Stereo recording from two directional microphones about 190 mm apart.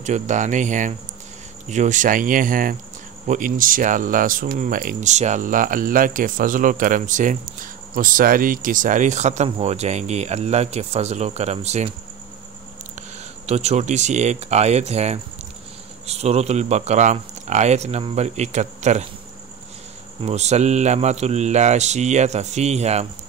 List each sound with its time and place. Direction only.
0.0 s speech: 40° right (ahead or behind)
13.5 s speech: 35° right (ahead or behind)
20.2 s speech: 35° right (ahead or behind)